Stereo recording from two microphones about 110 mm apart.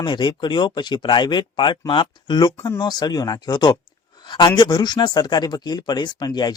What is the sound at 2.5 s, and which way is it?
Speech, 25° left (ahead or behind).